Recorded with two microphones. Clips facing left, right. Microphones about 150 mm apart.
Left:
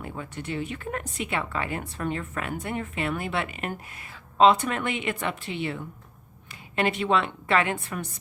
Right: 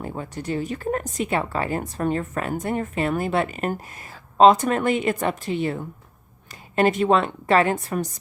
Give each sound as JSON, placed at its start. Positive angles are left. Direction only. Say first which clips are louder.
{"t": 0.0, "sound": "speech", "louder": "right 5 dB", "side_deg": -35}